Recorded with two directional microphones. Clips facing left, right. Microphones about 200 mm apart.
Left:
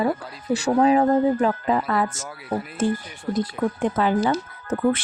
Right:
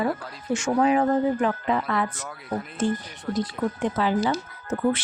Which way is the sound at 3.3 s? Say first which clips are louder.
Left 3 dB; 50° left (ahead or behind).